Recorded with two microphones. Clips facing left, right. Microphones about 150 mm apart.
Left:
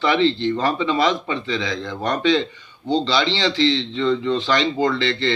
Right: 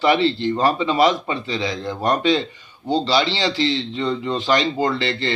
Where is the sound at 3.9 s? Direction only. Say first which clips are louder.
Left 3 dB; 45° right (ahead or behind).